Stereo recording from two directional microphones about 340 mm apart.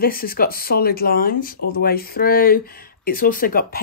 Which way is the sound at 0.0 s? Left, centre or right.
Left.